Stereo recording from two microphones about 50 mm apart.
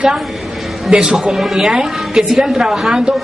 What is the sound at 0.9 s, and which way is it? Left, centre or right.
Speech, centre.